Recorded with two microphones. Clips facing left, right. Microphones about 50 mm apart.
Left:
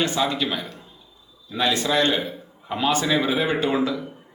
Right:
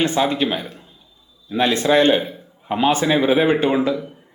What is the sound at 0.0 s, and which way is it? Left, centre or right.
A man's voice, right.